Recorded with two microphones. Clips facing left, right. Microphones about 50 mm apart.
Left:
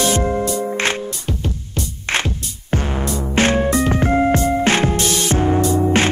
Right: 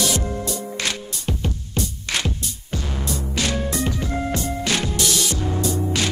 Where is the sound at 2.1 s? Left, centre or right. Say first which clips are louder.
Left 6 dB; left.